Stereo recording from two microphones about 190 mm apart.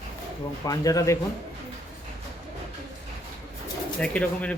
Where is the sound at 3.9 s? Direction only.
5° left (ahead or behind).